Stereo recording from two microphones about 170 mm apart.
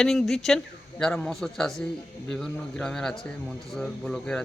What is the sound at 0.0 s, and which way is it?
Speech, centre (ahead or behind).